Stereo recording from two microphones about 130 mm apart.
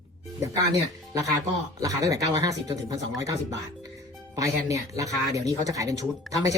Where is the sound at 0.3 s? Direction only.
30° right (ahead or behind).